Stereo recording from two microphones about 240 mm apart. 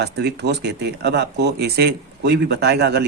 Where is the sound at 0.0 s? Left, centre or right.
Right.